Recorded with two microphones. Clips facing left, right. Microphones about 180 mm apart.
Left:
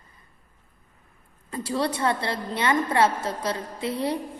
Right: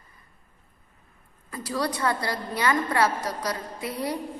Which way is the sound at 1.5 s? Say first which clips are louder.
Left 2 dB; 25° left (ahead or behind).